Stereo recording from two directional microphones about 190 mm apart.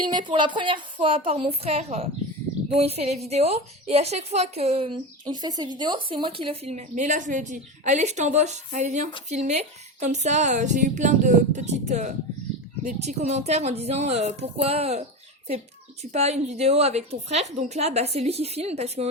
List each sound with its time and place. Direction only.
0.1 s a woman's voice: 25° right (ahead or behind)
5.2 s speech: 20° right (ahead or behind)
16.1 s speech: 35° right (ahead or behind)